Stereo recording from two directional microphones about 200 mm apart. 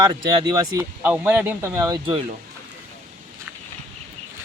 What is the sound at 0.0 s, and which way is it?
Speech, 25° right (ahead or behind).